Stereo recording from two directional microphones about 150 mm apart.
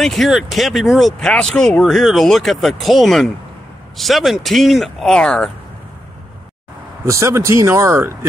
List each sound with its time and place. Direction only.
0.0 s speech: centre (ahead or behind)
7.1 s speech: 20° right (ahead or behind)